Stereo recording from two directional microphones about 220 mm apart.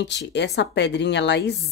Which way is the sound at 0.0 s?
50° left (ahead or behind).